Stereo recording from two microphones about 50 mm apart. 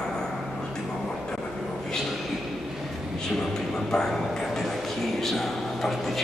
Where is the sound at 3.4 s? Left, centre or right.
Centre.